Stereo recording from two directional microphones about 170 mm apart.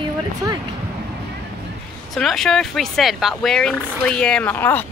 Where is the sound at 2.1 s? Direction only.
Centre (ahead or behind).